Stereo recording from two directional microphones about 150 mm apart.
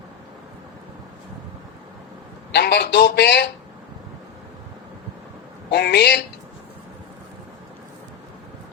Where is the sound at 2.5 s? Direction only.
90° left.